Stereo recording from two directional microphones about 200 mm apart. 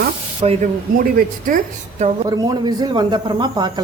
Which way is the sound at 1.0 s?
45° right (ahead or behind).